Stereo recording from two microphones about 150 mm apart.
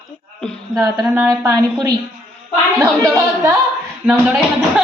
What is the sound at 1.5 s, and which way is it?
Speech, 25° right (ahead or behind).